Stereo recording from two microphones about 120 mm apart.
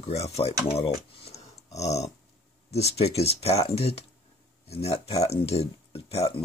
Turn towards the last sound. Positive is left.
turn(degrees=55)  # may be behind; listen again after turning